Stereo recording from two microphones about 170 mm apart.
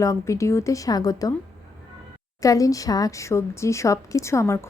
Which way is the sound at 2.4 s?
20° left (ahead or behind).